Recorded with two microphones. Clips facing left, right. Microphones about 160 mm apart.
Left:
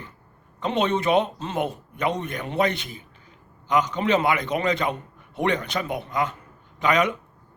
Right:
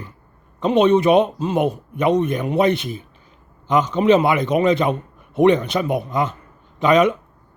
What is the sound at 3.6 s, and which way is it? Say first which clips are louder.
Speech: right 7 dB; 25° right (ahead or behind).